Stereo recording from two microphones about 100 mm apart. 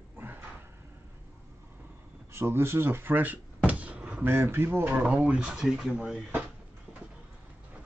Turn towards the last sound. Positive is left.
turn(degrees=-5)  # may be behind; listen again after turning